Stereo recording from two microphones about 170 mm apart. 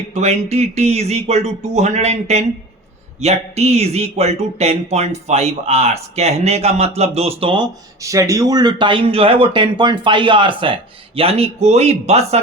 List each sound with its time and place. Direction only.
0.1 s speech: 40° right (ahead or behind)